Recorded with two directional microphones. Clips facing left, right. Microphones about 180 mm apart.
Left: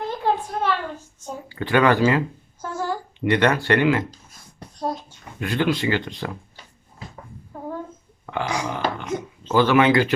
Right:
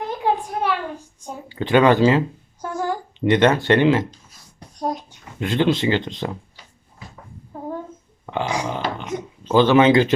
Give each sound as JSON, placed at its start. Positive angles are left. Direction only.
{"t": 0.1, "sound": "a sound", "side_deg": -15}
{"t": 4.8, "sound": "a child's voice", "side_deg": -15}
{"t": 8.3, "sound": "burping", "side_deg": -20}
{"t": 9.5, "sound": "speech", "side_deg": -20}